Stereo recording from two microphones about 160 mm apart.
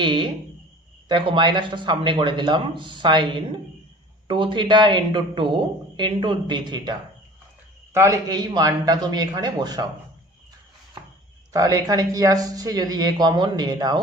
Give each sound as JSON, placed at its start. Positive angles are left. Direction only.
{"t": 0.0, "sound": "speech", "side_deg": -30}
{"t": 7.9, "sound": "speech", "side_deg": -20}
{"t": 11.5, "sound": "speech", "side_deg": -20}